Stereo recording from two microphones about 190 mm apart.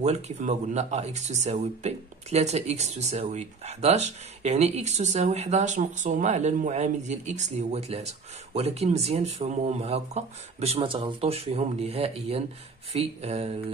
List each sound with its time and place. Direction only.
0.0 s speech: 35° right (ahead or behind)